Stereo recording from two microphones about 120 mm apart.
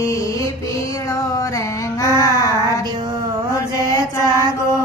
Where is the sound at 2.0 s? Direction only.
25° left (ahead or behind).